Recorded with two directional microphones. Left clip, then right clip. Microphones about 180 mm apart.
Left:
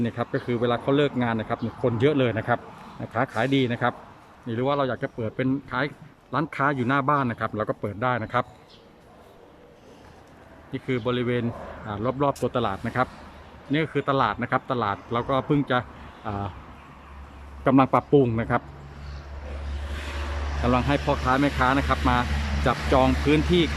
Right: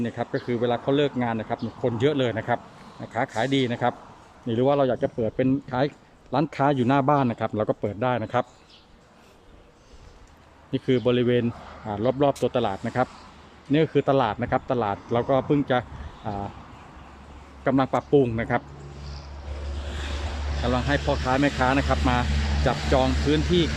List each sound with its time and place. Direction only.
0.0 s speech: centre (ahead or behind)
10.7 s speech: 10° right (ahead or behind)
17.6 s speech: 5° left (ahead or behind)
20.7 s speech: 5° left (ahead or behind)